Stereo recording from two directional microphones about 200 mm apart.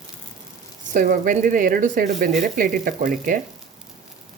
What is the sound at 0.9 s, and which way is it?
Speech, 45° right (ahead or behind).